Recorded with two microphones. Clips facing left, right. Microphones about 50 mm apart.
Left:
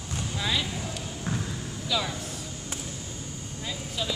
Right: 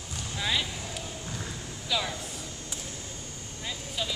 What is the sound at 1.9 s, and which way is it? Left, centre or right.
Speech, centre.